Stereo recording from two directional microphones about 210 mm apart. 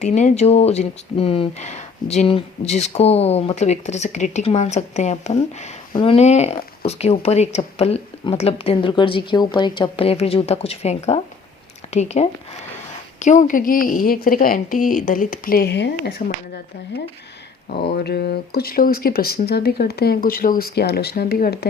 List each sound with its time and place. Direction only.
0.0 s speech: 35° left (ahead or behind); by 16.2 s 55° left (ahead or behind)
17.8 s speech: 50° left (ahead or behind)